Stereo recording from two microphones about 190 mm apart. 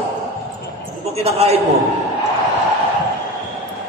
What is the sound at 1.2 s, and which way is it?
Speech, 35° right (ahead or behind).